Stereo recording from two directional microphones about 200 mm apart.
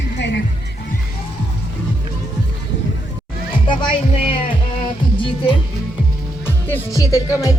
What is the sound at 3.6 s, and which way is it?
Speech, 25° left (ahead or behind).